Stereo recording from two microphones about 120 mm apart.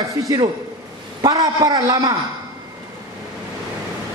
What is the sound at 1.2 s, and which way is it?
Speech, 30° right (ahead or behind).